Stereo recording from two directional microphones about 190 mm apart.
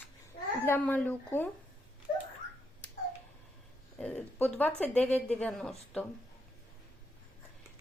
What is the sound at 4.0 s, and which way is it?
Speech, 10° left (ahead or behind).